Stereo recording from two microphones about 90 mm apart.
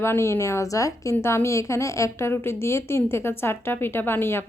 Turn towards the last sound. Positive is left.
turn(degrees=25)  # may be behind; listen again after turning